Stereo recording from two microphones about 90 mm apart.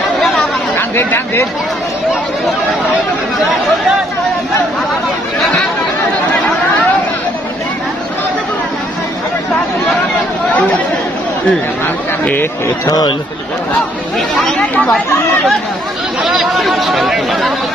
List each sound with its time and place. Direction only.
0.7 s speech: 25° left (ahead or behind)
5.4 s chatter: 5° left (ahead or behind)
12.8 s speech: 50° left (ahead or behind)
14.1 s speech: 5° left (ahead or behind)
16.2 s speech: 5° right (ahead or behind)